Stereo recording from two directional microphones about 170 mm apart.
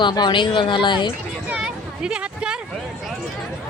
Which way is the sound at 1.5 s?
5° right (ahead or behind).